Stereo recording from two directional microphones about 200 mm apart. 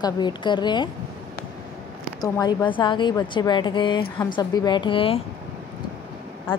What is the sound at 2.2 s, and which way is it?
Speech, 20° left (ahead or behind).